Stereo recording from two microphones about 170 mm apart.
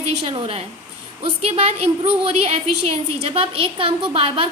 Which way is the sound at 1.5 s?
35° right (ahead or behind).